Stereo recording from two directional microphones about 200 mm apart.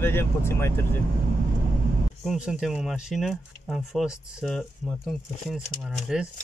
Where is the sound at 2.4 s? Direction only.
5° right (ahead or behind).